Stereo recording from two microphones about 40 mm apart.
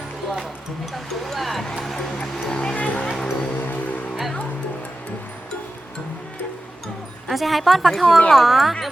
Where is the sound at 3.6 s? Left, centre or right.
Left.